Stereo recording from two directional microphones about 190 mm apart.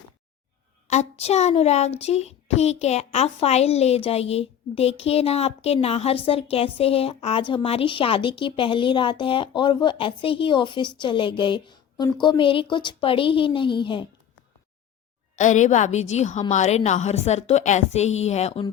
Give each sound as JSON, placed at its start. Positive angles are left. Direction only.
{"t": 0.9, "sound": "speech", "side_deg": 35}
{"t": 15.4, "sound": "a woman's voice", "side_deg": 40}